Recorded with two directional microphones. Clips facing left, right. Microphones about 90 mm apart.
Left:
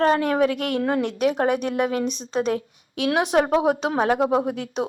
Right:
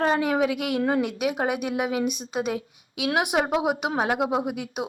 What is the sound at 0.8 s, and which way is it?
Speech, 25° right (ahead or behind).